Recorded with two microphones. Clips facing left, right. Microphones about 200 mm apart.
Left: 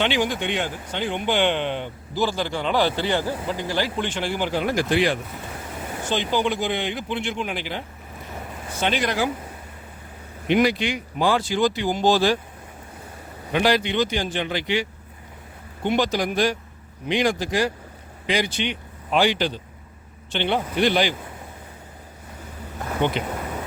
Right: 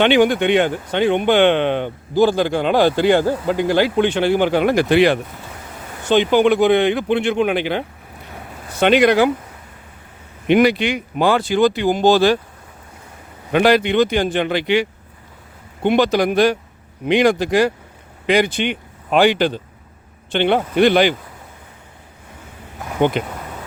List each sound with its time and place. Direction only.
0.0 s speech: 60° right (ahead or behind)
10.5 s speech: 65° right (ahead or behind)
13.5 s speech: 60° right (ahead or behind)
23.2 s speech: 50° right (ahead or behind)